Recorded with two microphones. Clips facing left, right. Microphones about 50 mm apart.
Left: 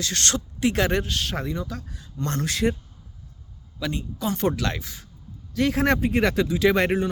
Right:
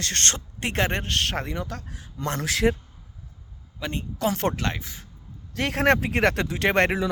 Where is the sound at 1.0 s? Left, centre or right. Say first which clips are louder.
Right 1 dB; right.